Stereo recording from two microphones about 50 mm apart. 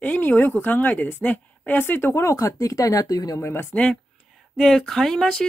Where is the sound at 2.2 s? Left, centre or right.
Left.